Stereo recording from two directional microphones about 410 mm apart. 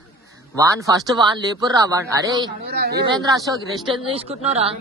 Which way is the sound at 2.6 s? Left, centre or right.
Right.